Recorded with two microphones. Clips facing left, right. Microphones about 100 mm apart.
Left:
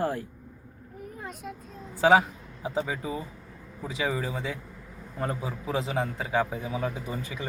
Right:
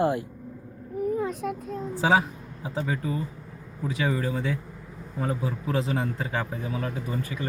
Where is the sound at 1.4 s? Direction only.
90° right.